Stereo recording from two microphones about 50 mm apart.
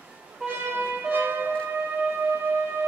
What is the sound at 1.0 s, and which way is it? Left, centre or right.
Music, right.